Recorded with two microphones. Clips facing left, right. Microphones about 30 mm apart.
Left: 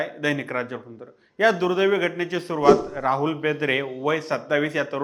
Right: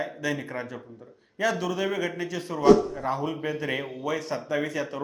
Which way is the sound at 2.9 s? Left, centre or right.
Left.